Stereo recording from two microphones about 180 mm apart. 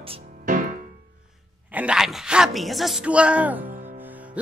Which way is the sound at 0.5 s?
45° right (ahead or behind).